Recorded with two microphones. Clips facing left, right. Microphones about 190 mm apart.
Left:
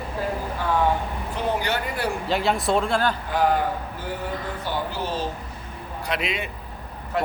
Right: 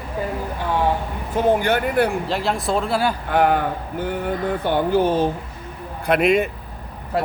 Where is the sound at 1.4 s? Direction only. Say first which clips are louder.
Right 8 dB; 50° right (ahead or behind).